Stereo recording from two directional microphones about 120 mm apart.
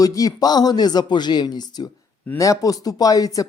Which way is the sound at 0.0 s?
30° left (ahead or behind).